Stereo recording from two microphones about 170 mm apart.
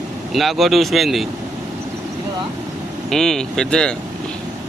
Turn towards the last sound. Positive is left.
turn(degrees=5)  # may be behind; listen again after turning